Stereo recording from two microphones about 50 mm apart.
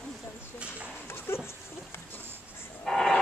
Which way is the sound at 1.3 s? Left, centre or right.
Left.